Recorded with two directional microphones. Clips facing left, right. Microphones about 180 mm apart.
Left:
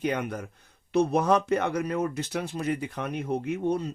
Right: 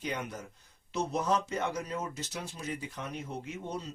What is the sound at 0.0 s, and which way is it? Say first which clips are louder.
Speech: left 8 dB; 55° left (ahead or behind).